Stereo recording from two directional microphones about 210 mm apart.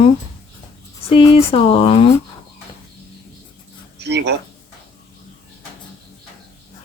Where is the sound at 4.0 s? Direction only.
55° right (ahead or behind).